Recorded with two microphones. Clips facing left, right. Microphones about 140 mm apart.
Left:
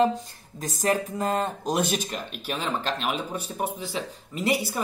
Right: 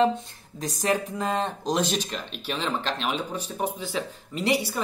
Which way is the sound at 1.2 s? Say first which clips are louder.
Left 1 dB; 5° left (ahead or behind).